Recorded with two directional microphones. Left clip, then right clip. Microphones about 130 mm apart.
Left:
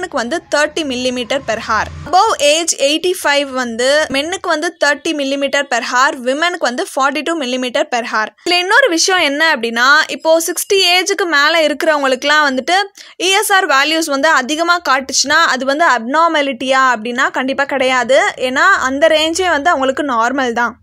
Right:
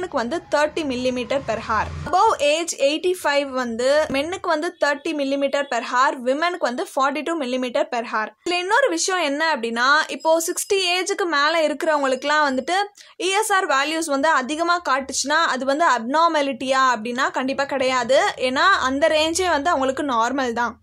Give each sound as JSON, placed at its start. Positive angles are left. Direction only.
{"t": 0.1, "sound": "speech", "side_deg": 20}